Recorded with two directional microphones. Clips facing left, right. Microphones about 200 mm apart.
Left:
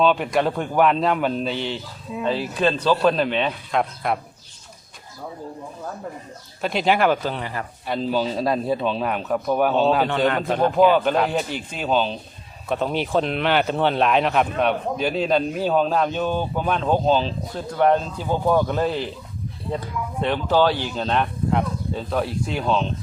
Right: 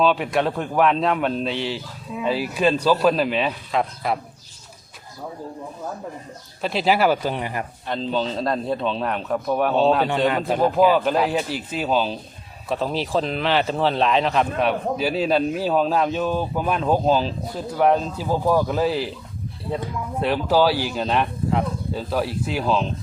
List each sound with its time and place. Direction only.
0.0 s a man's voice: centre (ahead or behind)
6.6 s speech: centre (ahead or behind)
7.9 s a man's voice: 5° left (ahead or behind)